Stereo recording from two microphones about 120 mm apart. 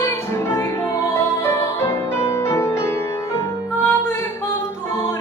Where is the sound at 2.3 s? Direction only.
25° left (ahead or behind).